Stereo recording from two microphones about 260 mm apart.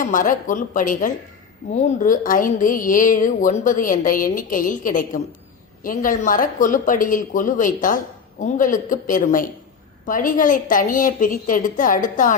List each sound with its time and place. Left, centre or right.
0.0 s speech: left